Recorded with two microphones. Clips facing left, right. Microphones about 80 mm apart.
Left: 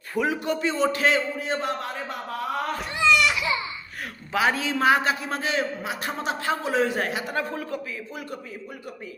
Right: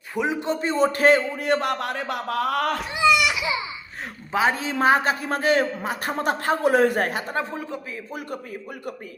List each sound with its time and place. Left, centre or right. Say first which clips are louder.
0.1 s speech: even; right
0.6 s speech: right 5 dB; right
2.9 s a sound: even; centre
4.3 s a man's voice: right 1 dB; right
7.3 s speech: right 1 dB; right